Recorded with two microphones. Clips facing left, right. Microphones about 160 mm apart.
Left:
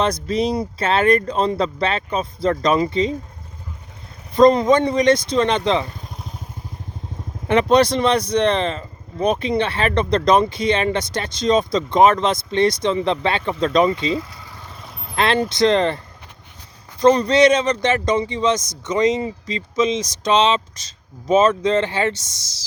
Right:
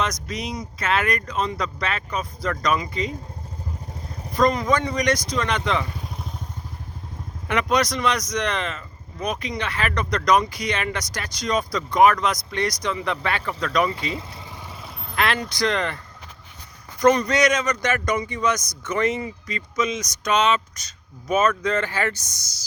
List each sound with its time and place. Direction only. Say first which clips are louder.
0.0 s speech: left 8 dB; 30° left (ahead or behind)
4.4 s speech: left 7 dB; 25° left (ahead or behind)
6.0 s motorcycle: right 1 dB; centre (ahead or behind)
7.4 s speech: left 7 dB; 25° left (ahead or behind)
17.0 s speech: left 5 dB; 30° left (ahead or behind)